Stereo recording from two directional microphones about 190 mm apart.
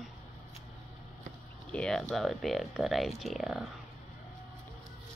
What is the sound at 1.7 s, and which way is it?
Speech, 5° left (ahead or behind).